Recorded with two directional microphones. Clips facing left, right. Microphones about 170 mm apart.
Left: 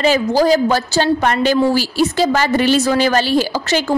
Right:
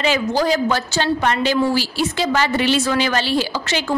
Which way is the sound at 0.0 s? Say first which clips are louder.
Left 5 dB; 40° left (ahead or behind).